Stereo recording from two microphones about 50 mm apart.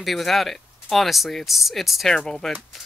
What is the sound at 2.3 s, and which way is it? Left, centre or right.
Speech, centre.